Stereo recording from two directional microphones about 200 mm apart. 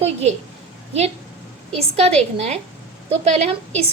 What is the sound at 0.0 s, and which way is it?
Speech, 30° right (ahead or behind).